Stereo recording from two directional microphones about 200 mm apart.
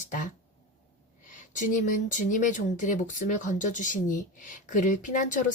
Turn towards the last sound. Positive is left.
turn(degrees=40)  # may be behind; listen again after turning